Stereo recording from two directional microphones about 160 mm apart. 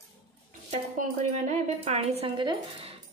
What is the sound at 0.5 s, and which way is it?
Speech, 50° right (ahead or behind).